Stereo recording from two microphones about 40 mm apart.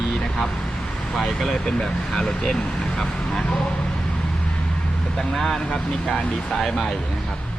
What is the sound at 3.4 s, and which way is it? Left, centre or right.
Speech, left.